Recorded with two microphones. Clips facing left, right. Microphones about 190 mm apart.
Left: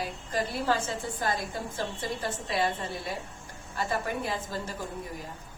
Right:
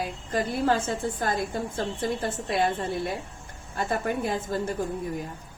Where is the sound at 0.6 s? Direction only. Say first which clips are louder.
Right 6 dB; 50° right (ahead or behind).